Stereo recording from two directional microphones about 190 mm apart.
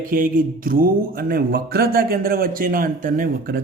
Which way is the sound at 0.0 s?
45° right (ahead or behind).